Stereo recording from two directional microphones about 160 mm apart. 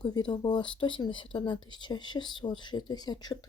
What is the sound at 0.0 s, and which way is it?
Speech, 25° left (ahead or behind).